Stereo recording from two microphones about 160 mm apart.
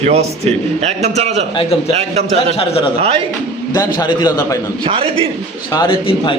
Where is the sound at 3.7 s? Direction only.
25° left (ahead or behind).